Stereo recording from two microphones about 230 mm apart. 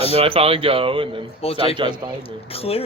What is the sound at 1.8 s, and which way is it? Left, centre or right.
Speech, right.